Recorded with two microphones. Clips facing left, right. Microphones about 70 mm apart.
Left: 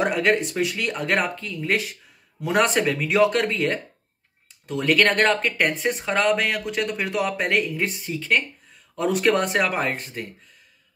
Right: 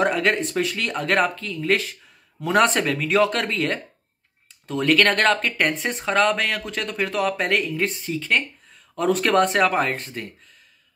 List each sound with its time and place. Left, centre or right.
0.0 s speech: centre